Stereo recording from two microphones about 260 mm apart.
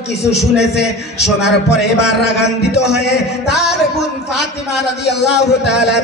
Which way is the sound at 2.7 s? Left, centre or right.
Left.